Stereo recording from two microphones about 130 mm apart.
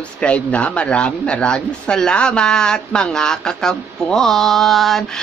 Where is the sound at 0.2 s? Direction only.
10° left (ahead or behind).